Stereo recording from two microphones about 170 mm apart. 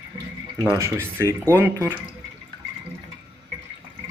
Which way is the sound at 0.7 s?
15° right (ahead or behind).